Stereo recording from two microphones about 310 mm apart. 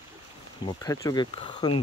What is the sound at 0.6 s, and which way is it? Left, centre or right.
Speech, centre.